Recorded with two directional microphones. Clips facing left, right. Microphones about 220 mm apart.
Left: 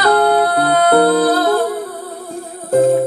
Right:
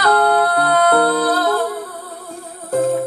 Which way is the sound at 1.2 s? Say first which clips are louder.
Left 4 dB; 25° left (ahead or behind).